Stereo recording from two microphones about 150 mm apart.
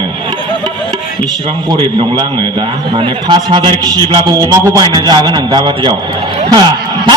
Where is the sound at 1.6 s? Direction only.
30° right (ahead or behind).